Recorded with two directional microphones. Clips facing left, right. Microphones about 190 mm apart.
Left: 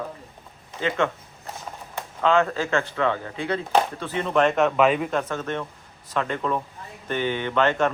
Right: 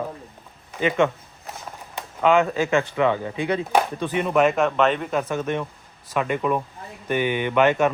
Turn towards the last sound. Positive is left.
turn(degrees=-10)  # may be behind; listen again after turning